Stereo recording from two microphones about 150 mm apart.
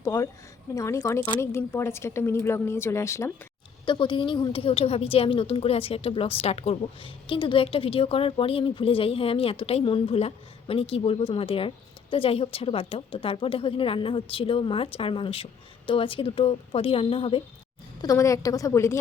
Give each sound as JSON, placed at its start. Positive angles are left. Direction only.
{"t": 0.0, "sound": "a woman's voice", "side_deg": 20}
{"t": 3.8, "sound": "a woman's voice", "side_deg": 30}
{"t": 18.0, "sound": "a woman's voice", "side_deg": 20}